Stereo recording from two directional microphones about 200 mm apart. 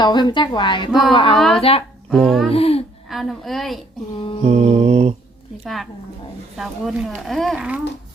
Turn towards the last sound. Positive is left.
turn(degrees=-5)  # may be behind; listen again after turning